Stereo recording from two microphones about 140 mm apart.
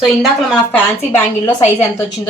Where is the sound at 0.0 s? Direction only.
Centre (ahead or behind).